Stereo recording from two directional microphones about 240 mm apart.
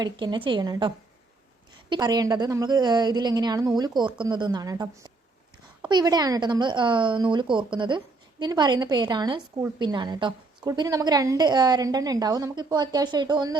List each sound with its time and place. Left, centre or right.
0.0 s a woman's voice: centre